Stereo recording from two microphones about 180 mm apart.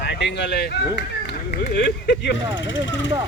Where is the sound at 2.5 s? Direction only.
90° left.